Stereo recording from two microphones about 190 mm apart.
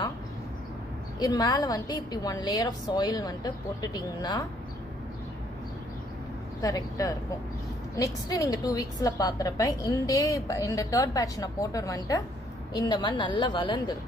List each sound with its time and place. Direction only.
1.2 s a woman's voice: 20° left (ahead or behind)
6.6 s a woman's voice: 20° left (ahead or behind)